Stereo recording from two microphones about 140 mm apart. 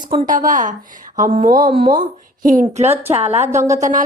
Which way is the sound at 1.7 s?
35° right (ahead or behind).